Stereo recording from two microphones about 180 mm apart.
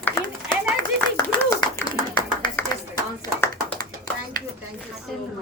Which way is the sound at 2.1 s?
20° left (ahead or behind).